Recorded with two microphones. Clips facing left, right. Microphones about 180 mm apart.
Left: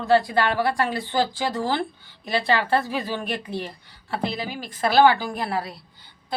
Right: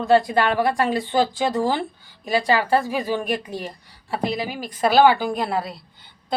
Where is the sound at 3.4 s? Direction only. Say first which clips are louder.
Even; 40° right (ahead or behind).